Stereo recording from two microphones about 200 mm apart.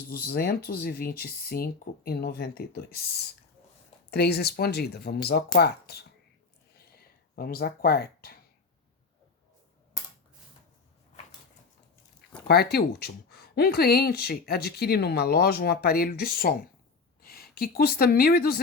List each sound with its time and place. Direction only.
0.1 s speech: 50° left (ahead or behind)
4.1 s speech: 55° left (ahead or behind)
7.3 s speech: 50° left (ahead or behind)
12.5 s speech: 50° left (ahead or behind)